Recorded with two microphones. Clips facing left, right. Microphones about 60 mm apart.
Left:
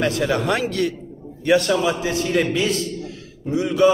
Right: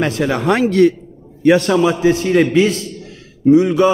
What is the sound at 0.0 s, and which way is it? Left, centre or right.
A man's voice, right.